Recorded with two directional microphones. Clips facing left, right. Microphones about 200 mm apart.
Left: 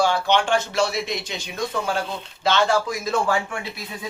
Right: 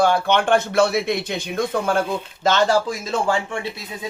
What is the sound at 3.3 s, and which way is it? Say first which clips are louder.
Speech: right 2 dB; 25° right (ahead or behind).